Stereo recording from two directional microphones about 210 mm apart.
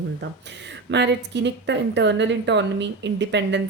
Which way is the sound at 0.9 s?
55° right (ahead or behind).